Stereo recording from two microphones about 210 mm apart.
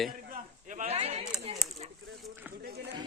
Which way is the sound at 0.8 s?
30° right (ahead or behind).